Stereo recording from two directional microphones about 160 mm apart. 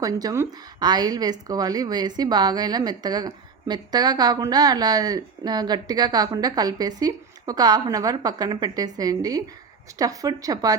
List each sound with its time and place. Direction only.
0.0 s a woman's voice: 25° right (ahead or behind)